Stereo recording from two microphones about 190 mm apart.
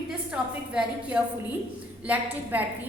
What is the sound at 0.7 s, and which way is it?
Speech, 5° right (ahead or behind).